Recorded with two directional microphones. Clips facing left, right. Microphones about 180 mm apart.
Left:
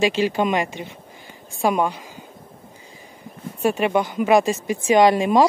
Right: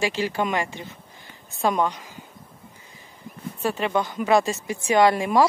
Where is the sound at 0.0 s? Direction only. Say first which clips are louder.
Left 5 dB; 20° left (ahead or behind).